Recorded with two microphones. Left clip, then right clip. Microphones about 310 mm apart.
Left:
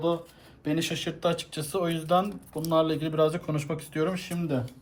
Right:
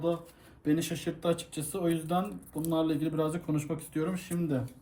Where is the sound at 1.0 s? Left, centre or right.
Centre.